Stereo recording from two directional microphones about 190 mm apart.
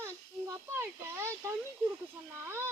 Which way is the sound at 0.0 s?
15° right (ahead or behind).